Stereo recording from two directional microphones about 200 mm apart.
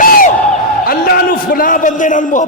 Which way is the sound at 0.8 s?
50° left (ahead or behind).